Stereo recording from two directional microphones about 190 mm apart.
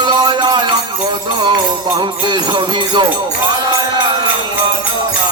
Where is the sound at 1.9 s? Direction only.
25° right (ahead or behind).